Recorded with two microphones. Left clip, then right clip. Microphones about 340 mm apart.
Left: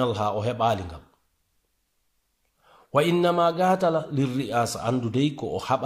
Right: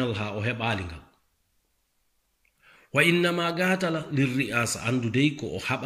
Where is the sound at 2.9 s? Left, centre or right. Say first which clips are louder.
Left 1 dB; centre.